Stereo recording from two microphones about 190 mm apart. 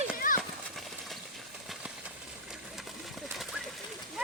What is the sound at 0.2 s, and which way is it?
Horse, 45° left (ahead or behind).